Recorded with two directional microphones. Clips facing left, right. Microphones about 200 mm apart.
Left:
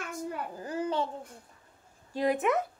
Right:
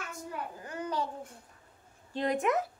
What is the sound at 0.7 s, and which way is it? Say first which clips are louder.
Babbling: left 5 dB; 30° left (ahead or behind).